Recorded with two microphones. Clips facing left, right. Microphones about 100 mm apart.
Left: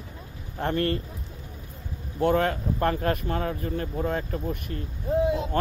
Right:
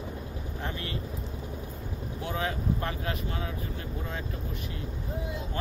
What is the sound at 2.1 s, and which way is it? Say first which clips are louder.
Speech: left 10 dB; 55° left (ahead or behind).